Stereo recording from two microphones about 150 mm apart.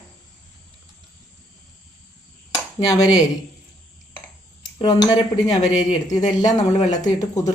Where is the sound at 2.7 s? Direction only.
25° left (ahead or behind).